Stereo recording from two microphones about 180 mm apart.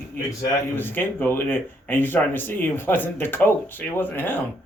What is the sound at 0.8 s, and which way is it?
A man's voice, 10° left (ahead or behind).